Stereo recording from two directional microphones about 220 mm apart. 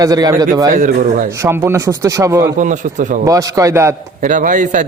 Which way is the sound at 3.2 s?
15° right (ahead or behind).